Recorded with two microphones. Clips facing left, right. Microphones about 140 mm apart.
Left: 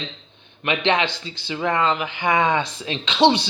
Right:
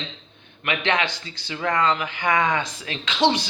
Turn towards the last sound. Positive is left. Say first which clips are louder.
# left 4 dB
turn(degrees=30)  # may be behind; listen again after turning